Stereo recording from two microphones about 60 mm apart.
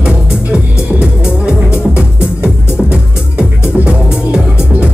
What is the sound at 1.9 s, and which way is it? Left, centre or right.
Music, centre.